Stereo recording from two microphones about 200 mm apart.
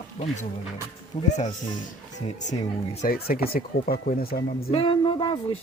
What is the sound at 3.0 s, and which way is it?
Speech, 50° left (ahead or behind).